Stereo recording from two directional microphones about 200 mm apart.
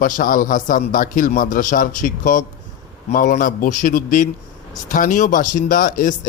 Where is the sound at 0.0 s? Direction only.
45° left (ahead or behind).